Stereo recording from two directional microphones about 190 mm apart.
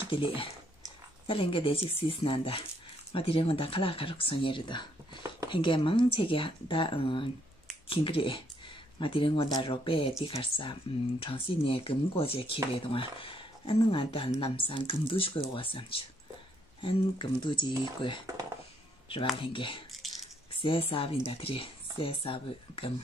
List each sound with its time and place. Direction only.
0.0 s speech: 30° left (ahead or behind)
19.5 s speech: 25° left (ahead or behind)